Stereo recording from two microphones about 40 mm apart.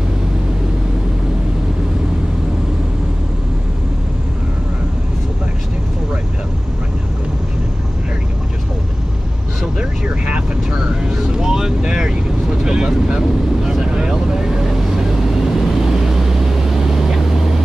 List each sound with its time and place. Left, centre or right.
10.0 s vehicle: right
11.1 s vehicle: centre